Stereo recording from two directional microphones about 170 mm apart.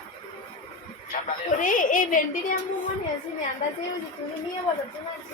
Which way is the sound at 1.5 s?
50° left (ahead or behind).